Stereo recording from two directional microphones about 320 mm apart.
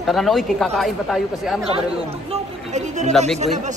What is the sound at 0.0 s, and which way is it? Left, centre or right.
Speech, centre.